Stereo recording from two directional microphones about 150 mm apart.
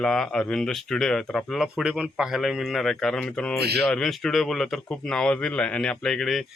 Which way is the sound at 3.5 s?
90° right.